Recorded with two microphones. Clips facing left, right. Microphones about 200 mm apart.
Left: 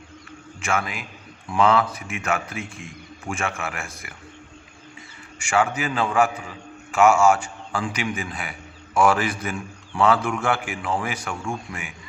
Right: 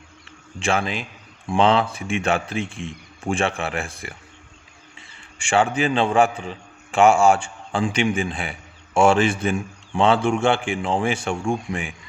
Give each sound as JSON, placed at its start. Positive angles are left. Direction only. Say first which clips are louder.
{"t": 0.6, "sound": "a man's voice", "louder": "right 3 dB", "side_deg": -30}
{"t": 5.4, "sound": "a man's voice", "louder": "right 3 dB", "side_deg": -30}